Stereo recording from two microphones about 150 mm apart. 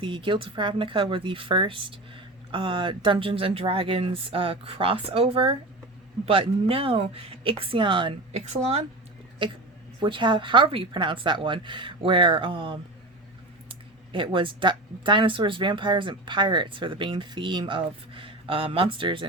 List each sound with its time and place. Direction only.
0.0 s speech: 35° right (ahead or behind)
8.4 s speech: 45° right (ahead or behind)
9.4 s speech: 30° right (ahead or behind)